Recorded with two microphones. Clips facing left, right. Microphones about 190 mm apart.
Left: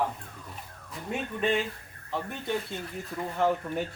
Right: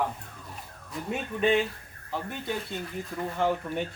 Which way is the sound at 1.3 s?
Centre (ahead or behind).